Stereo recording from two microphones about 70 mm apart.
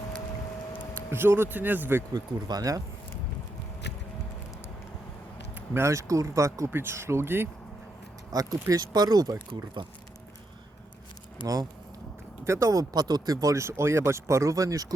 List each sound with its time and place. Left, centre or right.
1.1 s speech: right
2.1 s speech: right
5.8 s speech: right
6.7 s speech: right
8.3 s speech: right
11.4 s speech: right
12.9 s speech: right